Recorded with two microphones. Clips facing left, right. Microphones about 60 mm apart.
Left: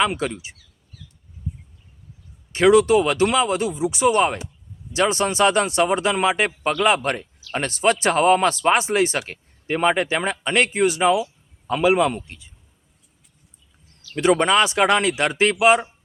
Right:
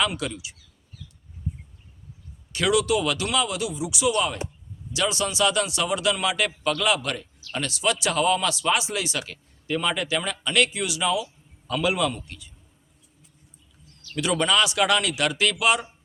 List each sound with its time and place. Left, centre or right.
0.0 s speech: left
2.5 s speech: left
14.2 s speech: left